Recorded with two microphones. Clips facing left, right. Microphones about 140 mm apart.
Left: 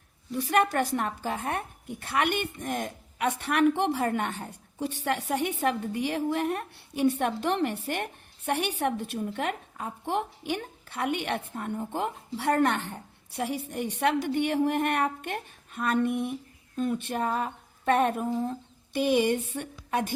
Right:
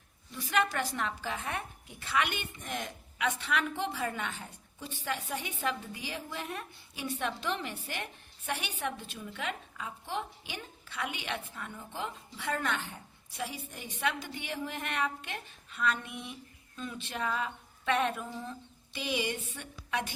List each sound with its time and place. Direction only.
0.3 s a woman's voice: 60° left (ahead or behind)
3.4 s a woman's voice: 60° left (ahead or behind)
9.2 s a woman's voice: 50° left (ahead or behind)